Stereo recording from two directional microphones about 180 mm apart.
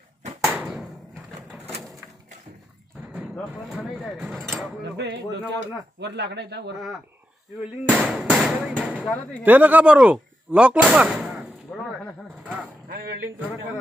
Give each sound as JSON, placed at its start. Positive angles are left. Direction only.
{"t": 0.4, "sound": "a sound", "side_deg": -5}
{"t": 3.3, "sound": "speech", "side_deg": 0}
{"t": 4.9, "sound": "speech", "side_deg": -70}
{"t": 7.6, "sound": "speech", "side_deg": -5}
{"t": 9.0, "sound": "speech", "side_deg": 10}
{"t": 9.4, "sound": "speech", "side_deg": -10}
{"t": 11.7, "sound": "a sound", "side_deg": 0}